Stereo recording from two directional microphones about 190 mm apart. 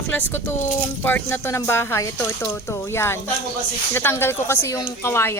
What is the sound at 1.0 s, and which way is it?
Speech, 10° left (ahead or behind).